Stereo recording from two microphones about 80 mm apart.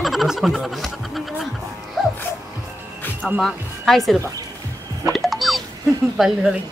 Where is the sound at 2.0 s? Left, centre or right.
Centre.